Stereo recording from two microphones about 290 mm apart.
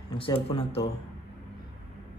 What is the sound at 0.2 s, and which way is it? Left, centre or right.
Speech, centre.